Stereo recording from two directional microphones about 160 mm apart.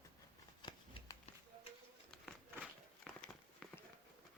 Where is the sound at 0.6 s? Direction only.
25° left (ahead or behind).